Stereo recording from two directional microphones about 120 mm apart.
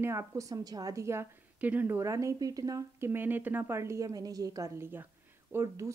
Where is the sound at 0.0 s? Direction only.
20° right (ahead or behind).